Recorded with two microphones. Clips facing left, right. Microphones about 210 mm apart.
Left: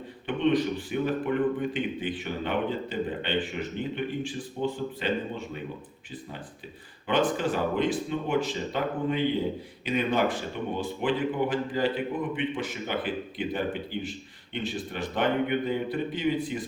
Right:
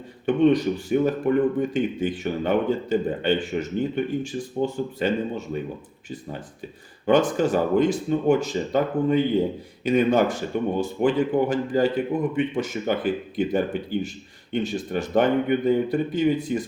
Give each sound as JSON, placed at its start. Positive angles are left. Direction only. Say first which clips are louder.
{"t": 0.3, "sound": "a man's voice", "louder": "right 6 dB", "side_deg": -45}
{"t": 7.1, "sound": "a man's voice", "louder": "right 6 dB", "side_deg": -45}